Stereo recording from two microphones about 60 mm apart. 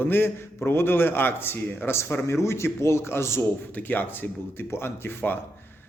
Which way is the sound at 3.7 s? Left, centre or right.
Left.